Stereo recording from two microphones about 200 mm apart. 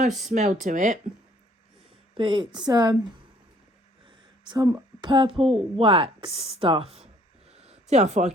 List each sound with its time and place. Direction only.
0.1 s speech: centre (ahead or behind)
0.3 s speech: 40° right (ahead or behind)
2.1 s a woman's voice: 25° right (ahead or behind)
4.0 s speech: 20° right (ahead or behind)
7.5 s a sound: 30° right (ahead or behind)